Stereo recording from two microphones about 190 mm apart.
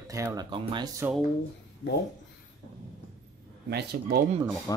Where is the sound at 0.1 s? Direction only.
15° right (ahead or behind).